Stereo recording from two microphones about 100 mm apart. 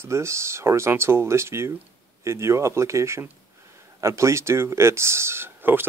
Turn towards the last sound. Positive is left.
turn(degrees=-20)  # may be behind; listen again after turning